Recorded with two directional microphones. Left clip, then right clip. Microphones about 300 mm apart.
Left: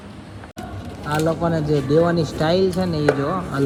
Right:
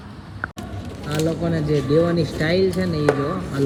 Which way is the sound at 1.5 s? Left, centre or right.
Centre.